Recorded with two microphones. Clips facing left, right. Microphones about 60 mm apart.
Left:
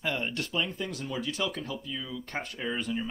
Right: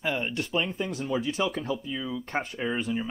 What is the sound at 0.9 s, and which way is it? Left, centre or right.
Speech, right.